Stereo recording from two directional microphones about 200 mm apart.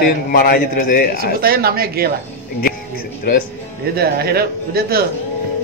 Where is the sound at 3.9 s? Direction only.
50° right (ahead or behind).